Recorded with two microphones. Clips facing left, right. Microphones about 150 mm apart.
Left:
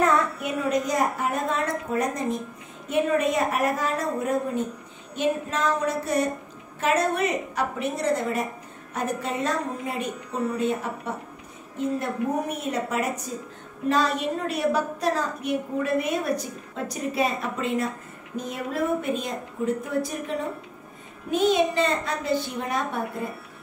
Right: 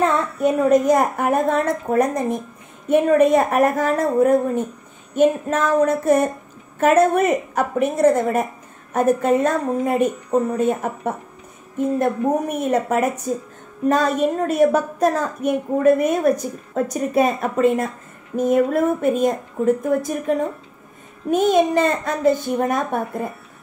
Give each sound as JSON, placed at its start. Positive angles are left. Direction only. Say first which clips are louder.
{"t": 0.4, "sound": "a woman's voice", "louder": "right 10 dB", "side_deg": -45}